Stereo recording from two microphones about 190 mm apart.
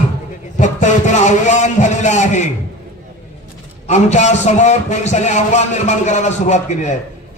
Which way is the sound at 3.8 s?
35° left (ahead or behind).